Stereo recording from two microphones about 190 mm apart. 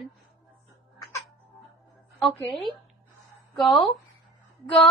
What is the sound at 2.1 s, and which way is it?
A woman's voice, centre (ahead or behind).